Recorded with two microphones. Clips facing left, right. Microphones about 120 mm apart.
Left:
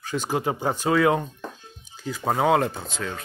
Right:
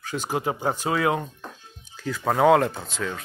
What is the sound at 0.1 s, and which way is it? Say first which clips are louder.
Speech: left 1 dB; 30° left (ahead or behind).